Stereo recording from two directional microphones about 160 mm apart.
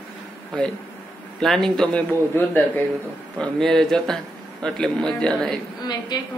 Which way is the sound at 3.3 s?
Centre (ahead or behind).